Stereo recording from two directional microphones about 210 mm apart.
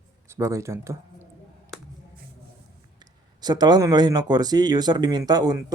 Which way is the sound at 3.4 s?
20° right (ahead or behind).